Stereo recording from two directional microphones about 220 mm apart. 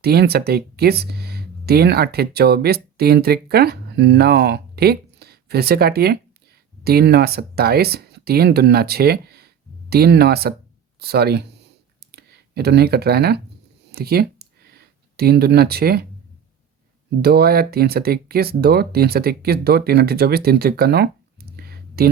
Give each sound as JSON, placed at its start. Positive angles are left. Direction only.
{"t": 0.0, "sound": "speech", "side_deg": -45}
{"t": 13.9, "sound": "a sound", "side_deg": -45}
{"t": 17.2, "sound": "speech", "side_deg": -45}